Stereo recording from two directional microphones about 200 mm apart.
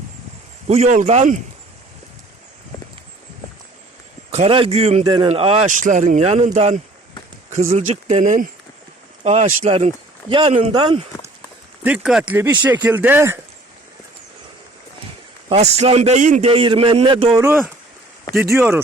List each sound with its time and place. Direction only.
0.7 s speech: 35° right (ahead or behind)
4.3 s a man's voice: 30° right (ahead or behind)
11.8 s speech: 5° right (ahead or behind)
15.4 s a man's voice: 30° right (ahead or behind)
17.3 s speech: 15° right (ahead or behind)